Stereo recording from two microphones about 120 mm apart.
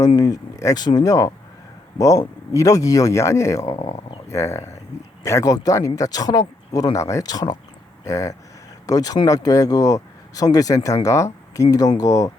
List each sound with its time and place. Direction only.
0.2 s speech: 30° left (ahead or behind)